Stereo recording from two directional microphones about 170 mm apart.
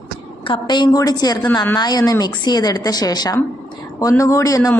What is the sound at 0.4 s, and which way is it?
A woman's voice, 30° left (ahead or behind).